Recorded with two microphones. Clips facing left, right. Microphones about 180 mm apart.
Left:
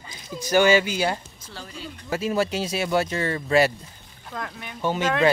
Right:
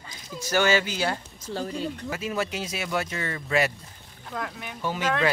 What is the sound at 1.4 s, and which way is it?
Speech, 45° right (ahead or behind).